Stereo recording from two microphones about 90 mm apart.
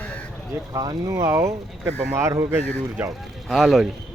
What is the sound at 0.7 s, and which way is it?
Speech, 40° right (ahead or behind).